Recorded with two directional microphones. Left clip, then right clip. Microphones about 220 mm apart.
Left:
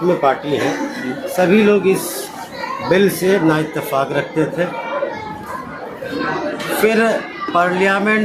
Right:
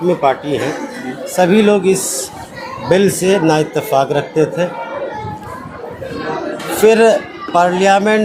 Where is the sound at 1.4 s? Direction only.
50° right (ahead or behind).